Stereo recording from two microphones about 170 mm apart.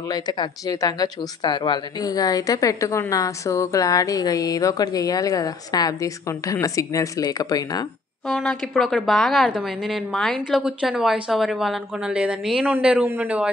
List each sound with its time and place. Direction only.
0.1 s speech: 25° left (ahead or behind)
8.3 s a woman's voice: 5° left (ahead or behind)